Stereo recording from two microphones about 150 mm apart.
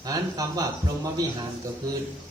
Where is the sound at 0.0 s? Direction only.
25° right (ahead or behind).